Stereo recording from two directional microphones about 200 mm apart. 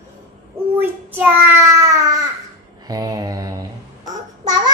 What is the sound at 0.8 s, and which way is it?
Child singing, 10° right (ahead or behind).